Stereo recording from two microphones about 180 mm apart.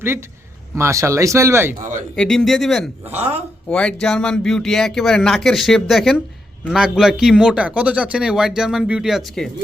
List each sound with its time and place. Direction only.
0.8 s speech: 15° right (ahead or behind)
2.1 s speech: 5° left (ahead or behind)
3.1 s speech: 35° right (ahead or behind)
3.7 s speech: 5° left (ahead or behind)